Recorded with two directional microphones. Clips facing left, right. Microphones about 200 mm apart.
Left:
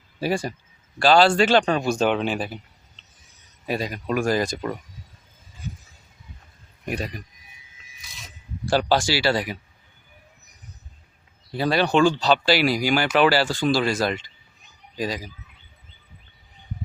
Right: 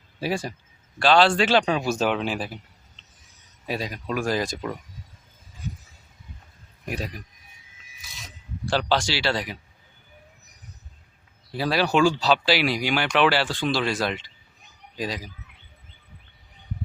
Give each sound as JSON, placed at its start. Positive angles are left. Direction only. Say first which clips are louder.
{"t": 0.2, "sound": "speech", "louder": "left 3 dB", "side_deg": 0}
{"t": 6.8, "sound": "speech", "louder": "left 3 dB", "side_deg": 0}
{"t": 8.0, "sound": "a sound", "louder": "right 1 dB", "side_deg": 0}
{"t": 8.7, "sound": "speech", "louder": "left 3 dB", "side_deg": 10}
{"t": 11.5, "sound": "speech", "louder": "left 2 dB", "side_deg": -5}